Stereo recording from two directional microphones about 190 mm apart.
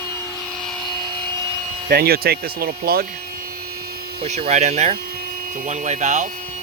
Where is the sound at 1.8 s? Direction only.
55° right (ahead or behind).